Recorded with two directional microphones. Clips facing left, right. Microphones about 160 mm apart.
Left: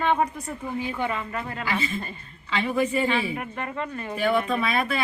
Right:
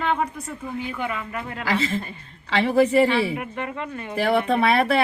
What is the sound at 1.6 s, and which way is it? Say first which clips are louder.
Speech: right 6 dB; 90° right.